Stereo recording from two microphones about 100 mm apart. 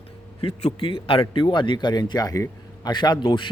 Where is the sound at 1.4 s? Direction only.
55° left (ahead or behind).